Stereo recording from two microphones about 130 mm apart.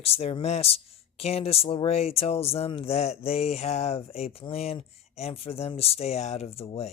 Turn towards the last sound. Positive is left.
turn(degrees=50)  # may be behind; listen again after turning